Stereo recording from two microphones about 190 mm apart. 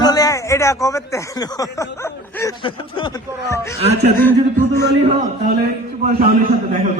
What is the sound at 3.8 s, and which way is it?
Speech, 35° right (ahead or behind).